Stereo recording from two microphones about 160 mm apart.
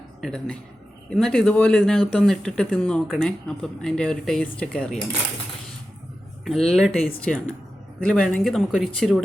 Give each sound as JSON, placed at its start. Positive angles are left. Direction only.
{"t": 0.2, "sound": "speech", "side_deg": 5}
{"t": 6.4, "sound": "speech", "side_deg": 0}